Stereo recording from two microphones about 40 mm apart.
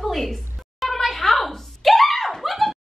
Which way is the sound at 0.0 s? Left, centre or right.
Centre.